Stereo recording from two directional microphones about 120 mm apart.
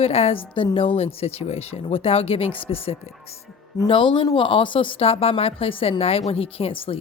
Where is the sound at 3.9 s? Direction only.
45° left (ahead or behind).